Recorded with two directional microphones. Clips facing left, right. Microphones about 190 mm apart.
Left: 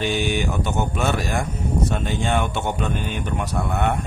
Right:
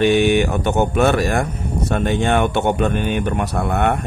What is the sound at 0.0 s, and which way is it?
Speech, 60° right (ahead or behind).